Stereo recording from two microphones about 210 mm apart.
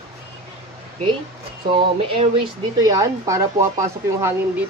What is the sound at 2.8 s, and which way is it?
Speech, 15° right (ahead or behind).